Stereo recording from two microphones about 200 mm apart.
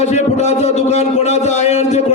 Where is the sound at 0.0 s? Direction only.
35° left (ahead or behind).